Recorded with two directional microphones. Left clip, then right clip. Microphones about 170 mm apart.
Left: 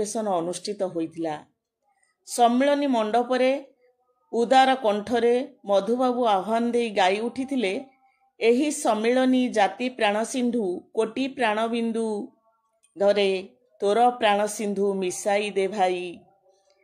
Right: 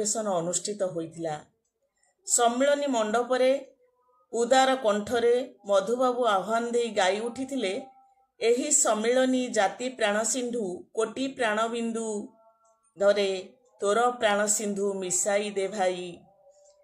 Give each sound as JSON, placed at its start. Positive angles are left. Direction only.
{"t": 0.0, "sound": "a woman's voice", "side_deg": 30}